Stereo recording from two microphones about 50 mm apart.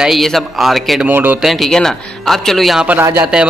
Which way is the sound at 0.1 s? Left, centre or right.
Centre.